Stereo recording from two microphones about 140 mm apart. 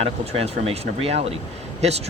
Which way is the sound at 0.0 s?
45° right (ahead or behind).